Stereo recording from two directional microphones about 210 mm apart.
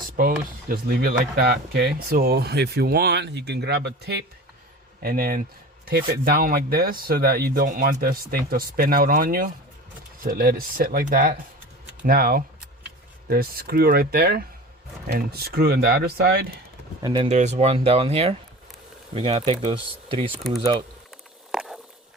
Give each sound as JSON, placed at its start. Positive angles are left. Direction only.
{"t": 0.7, "sound": "speech", "side_deg": -45}
{"t": 17.0, "sound": "speech", "side_deg": -20}
{"t": 17.2, "sound": "speech", "side_deg": -35}
{"t": 21.5, "sound": "a sound", "side_deg": -5}